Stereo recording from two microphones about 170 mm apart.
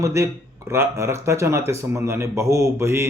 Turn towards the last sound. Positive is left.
turn(degrees=-15)  # may be behind; listen again after turning